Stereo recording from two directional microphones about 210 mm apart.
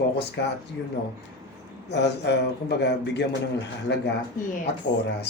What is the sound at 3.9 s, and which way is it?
Speech, 50° left (ahead or behind).